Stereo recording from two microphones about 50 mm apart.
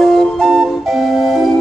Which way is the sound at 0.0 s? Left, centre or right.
Centre.